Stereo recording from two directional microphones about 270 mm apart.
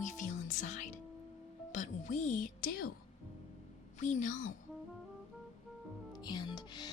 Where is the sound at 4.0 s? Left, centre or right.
Left.